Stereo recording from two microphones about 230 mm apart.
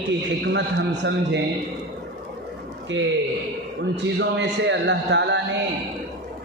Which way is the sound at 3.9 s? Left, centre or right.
Right.